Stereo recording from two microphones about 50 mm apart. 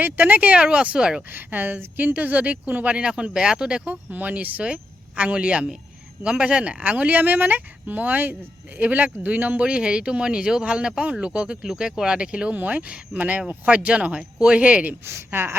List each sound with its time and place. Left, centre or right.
0.0 s speech: right
0.5 s speech: right
1.3 s speech: right
2.9 s speech: right
3.8 s speech: right
11.6 s speech: centre
12.5 s speech: right
15.3 s a woman's voice: right